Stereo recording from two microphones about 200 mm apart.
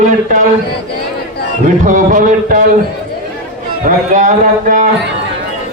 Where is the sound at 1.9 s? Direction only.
40° right (ahead or behind).